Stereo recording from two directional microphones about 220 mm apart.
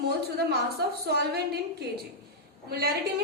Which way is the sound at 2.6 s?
45° right (ahead or behind).